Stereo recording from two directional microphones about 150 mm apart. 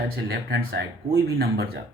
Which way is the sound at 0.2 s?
90° right.